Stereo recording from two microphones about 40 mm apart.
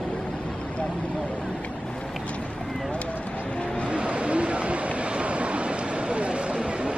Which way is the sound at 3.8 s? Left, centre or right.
Right.